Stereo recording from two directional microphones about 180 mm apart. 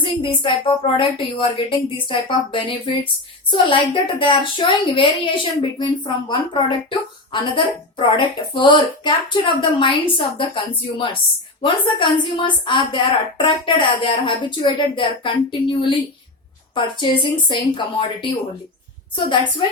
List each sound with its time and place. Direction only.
0.0 s speech: 30° left (ahead or behind)